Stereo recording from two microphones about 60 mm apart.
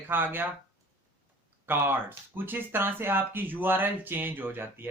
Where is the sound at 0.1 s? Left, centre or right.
Right.